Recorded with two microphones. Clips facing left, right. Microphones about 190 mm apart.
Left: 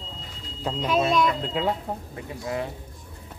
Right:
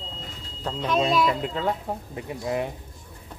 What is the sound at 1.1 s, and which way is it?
Speech, 5° right (ahead or behind).